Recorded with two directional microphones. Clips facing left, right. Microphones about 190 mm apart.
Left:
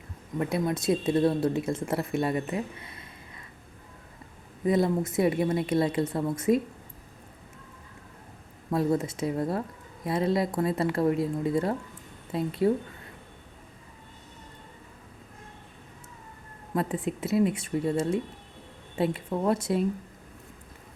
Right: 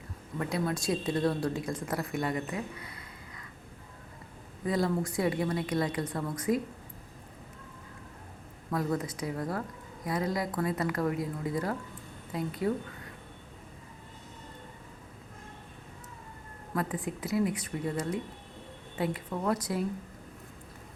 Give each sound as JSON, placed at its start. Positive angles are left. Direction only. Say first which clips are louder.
{"t": 0.3, "sound": "a woman's voice", "louder": "left 4 dB", "side_deg": 20}
{"t": 4.6, "sound": "a woman's voice", "louder": "left 5 dB", "side_deg": 20}
{"t": 8.7, "sound": "a woman's voice", "louder": "left 5 dB", "side_deg": 25}
{"t": 16.7, "sound": "a woman's voice", "louder": "left 4 dB", "side_deg": 25}